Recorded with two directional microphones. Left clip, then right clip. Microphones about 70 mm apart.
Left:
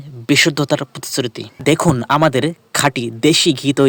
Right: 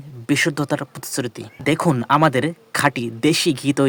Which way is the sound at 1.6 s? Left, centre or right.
Left.